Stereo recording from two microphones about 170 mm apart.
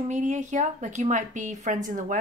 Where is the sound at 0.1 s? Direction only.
45° right (ahead or behind).